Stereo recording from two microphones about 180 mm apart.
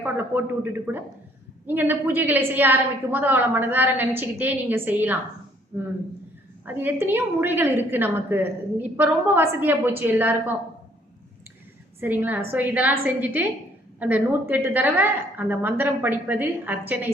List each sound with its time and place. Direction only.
0.0 s a woman's voice: 10° right (ahead or behind)
6.7 s a woman's voice: 10° right (ahead or behind)
11.9 s a woman's voice: 10° right (ahead or behind)